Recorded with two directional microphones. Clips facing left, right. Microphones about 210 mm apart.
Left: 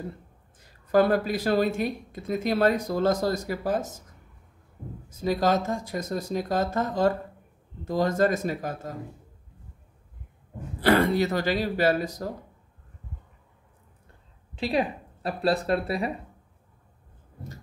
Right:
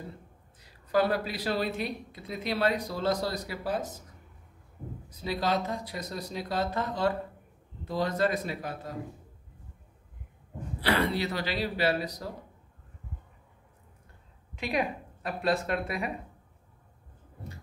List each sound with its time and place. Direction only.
0.6 s speech: 50° left (ahead or behind)
5.1 s speech: 45° left (ahead or behind)
10.8 s speech: 45° left (ahead or behind)
14.5 s speech: 30° left (ahead or behind)